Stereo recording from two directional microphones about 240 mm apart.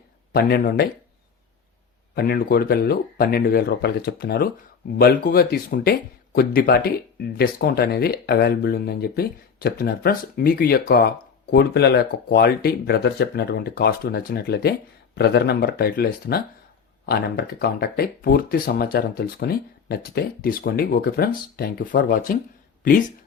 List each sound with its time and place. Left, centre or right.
0.3 s speech: left
2.1 s speech: left